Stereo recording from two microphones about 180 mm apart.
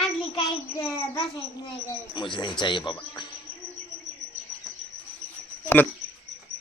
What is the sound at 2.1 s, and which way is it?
Speech, 25° left (ahead or behind).